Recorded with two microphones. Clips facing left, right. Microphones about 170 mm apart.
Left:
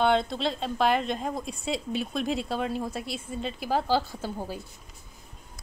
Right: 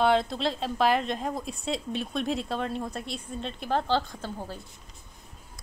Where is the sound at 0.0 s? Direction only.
Centre (ahead or behind).